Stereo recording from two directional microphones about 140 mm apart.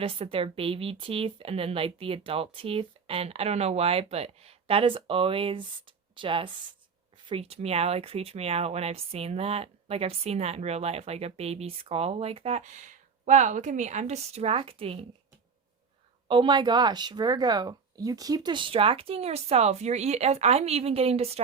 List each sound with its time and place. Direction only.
0.0 s speech: 40° right (ahead or behind)
16.3 s speech: 35° right (ahead or behind)